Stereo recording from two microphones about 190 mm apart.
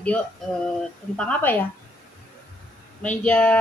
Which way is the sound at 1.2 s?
10° left (ahead or behind).